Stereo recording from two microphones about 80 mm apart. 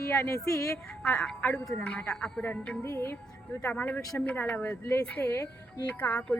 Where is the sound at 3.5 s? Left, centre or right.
Left.